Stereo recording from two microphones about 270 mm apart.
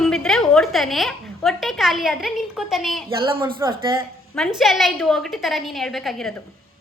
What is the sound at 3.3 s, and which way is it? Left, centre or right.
Speech, centre.